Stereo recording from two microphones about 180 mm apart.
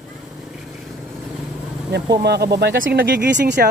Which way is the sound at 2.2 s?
65° right (ahead or behind).